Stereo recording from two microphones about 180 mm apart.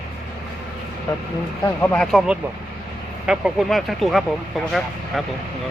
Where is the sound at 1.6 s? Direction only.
10° left (ahead or behind).